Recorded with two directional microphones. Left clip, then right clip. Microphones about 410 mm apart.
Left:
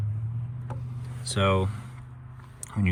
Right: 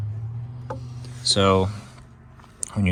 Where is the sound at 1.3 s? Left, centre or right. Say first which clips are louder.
Right 6 dB; centre.